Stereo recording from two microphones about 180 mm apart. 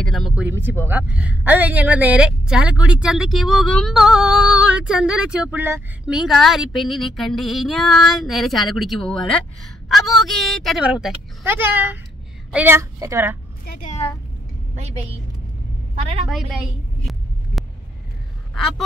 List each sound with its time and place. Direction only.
0.0 s speech: centre (ahead or behind)
0.5 s a woman's voice: 10° right (ahead or behind)
13.7 s a woman's voice: 45° left (ahead or behind)
16.3 s a sound: centre (ahead or behind)